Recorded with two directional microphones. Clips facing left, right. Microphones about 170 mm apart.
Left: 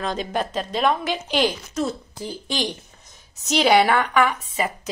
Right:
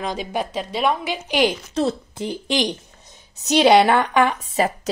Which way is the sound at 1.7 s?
30° right (ahead or behind).